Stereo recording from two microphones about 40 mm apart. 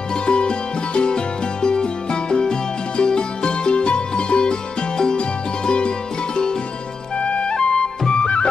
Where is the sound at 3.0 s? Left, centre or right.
Left.